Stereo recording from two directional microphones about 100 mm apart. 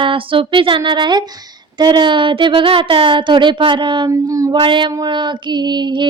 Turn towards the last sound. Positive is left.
turn(degrees=-50)  # may be behind; listen again after turning